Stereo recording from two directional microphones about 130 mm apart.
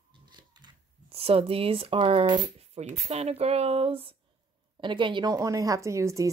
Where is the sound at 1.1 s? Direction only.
50° right (ahead or behind).